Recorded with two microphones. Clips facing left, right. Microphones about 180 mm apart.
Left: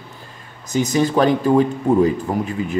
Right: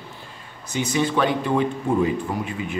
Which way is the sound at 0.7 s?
40° left (ahead or behind).